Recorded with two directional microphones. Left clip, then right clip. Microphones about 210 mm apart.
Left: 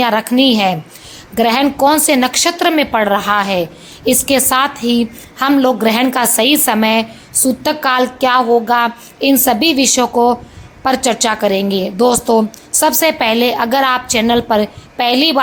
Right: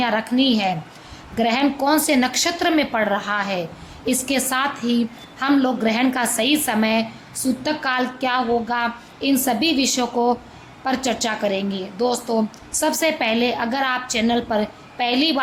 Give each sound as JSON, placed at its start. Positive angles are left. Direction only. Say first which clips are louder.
{"t": 0.0, "sound": "a woman's voice", "louder": "left 7 dB", "side_deg": 25}